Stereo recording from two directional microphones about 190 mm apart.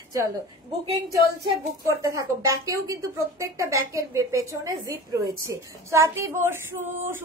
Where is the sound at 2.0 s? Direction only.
15° right (ahead or behind).